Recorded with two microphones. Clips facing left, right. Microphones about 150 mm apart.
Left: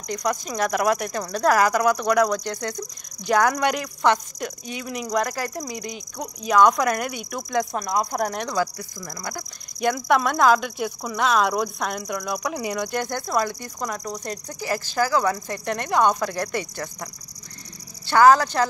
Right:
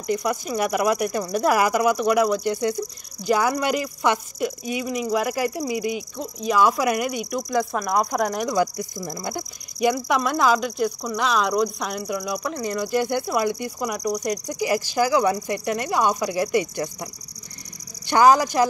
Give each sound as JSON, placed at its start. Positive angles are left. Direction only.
{"t": 0.0, "sound": "speech", "side_deg": -5}
{"t": 8.5, "sound": "speech", "side_deg": -20}
{"t": 9.8, "sound": "speech", "side_deg": -5}
{"t": 13.1, "sound": "speech", "side_deg": -15}